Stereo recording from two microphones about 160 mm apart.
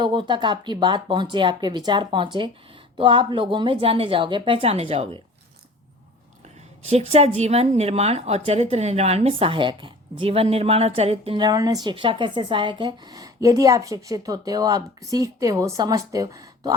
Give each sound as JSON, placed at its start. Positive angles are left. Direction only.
{"t": 0.0, "sound": "a woman's voice", "side_deg": -30}
{"t": 6.8, "sound": "a woman's voice", "side_deg": -40}